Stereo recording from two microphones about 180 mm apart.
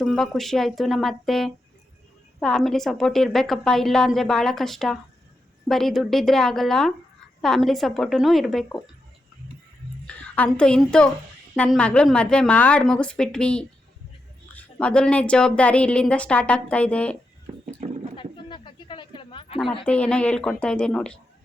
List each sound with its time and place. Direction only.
0.0 s a woman's voice: centre (ahead or behind)
10.1 s a woman's voice: 10° left (ahead or behind)
17.7 s horse: 35° right (ahead or behind)
18.2 s a sound: 25° left (ahead or behind)
19.8 s a woman's voice: 5° left (ahead or behind)